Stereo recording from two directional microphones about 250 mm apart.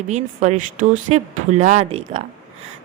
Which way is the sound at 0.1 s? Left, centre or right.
Right.